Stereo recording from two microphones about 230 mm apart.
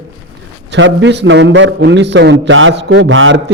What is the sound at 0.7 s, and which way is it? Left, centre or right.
A man's voice, right.